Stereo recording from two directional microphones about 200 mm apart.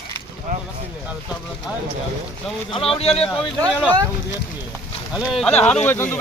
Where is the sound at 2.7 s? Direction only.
25° left (ahead or behind).